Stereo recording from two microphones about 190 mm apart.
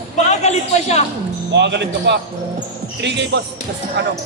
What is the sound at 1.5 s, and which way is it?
Speech, 65° right (ahead or behind).